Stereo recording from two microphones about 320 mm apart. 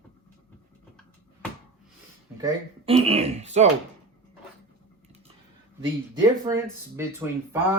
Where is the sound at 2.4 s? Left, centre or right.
Centre.